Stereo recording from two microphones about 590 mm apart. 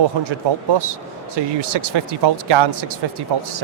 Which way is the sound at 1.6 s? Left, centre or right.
Right.